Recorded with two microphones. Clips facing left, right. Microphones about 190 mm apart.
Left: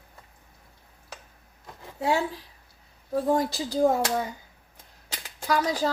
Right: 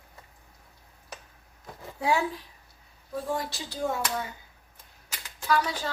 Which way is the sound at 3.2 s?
40° left (ahead or behind).